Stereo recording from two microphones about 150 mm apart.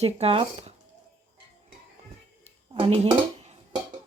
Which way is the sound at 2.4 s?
40° right (ahead or behind).